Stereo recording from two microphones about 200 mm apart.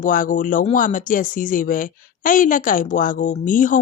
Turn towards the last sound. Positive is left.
turn(degrees=40)  # may be behind; listen again after turning